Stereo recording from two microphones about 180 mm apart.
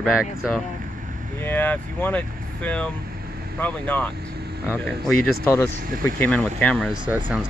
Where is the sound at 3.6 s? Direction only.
10° left (ahead or behind).